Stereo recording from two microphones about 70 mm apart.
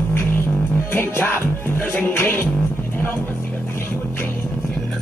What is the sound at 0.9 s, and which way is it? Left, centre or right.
Music, left.